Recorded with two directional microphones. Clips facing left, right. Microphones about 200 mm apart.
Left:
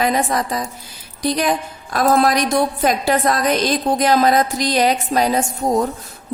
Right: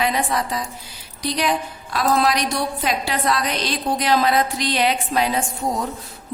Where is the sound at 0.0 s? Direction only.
45° left (ahead or behind).